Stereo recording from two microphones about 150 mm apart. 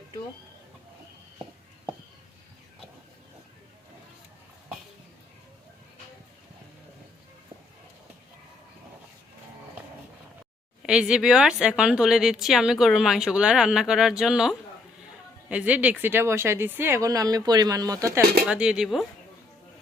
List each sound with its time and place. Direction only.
10.8 s speech: 5° right (ahead or behind); by 18.3 s 20° right (ahead or behind)
18.4 s speech: 5° right (ahead or behind)